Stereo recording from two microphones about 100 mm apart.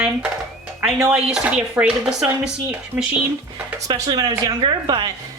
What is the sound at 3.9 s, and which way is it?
A woman's voice, 40° right (ahead or behind).